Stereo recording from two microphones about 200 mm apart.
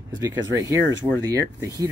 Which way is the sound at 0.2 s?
15° right (ahead or behind).